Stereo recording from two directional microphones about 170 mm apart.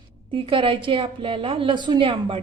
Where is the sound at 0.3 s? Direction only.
30° right (ahead or behind).